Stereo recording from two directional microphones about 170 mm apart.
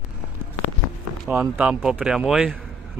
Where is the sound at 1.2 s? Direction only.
10° right (ahead or behind).